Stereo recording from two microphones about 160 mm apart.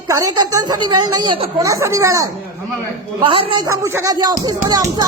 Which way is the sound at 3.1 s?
30° right (ahead or behind).